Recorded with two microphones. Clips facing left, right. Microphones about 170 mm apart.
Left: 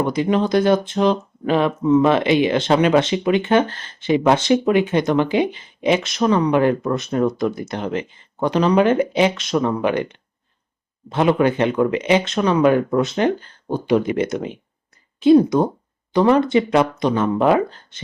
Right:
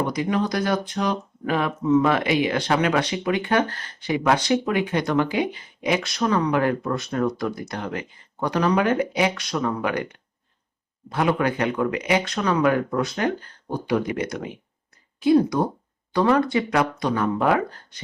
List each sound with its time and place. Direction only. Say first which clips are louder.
0.1 s speech: left 6 dB; 25° left (ahead or behind)